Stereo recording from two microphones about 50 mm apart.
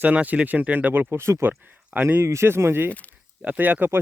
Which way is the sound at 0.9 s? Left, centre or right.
Right.